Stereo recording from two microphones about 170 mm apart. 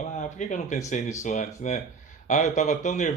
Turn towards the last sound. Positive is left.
turn(degrees=45)  # may be behind; listen again after turning